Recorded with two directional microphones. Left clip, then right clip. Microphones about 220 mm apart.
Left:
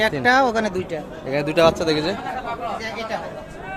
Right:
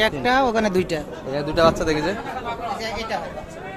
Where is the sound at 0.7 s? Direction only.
40° right (ahead or behind).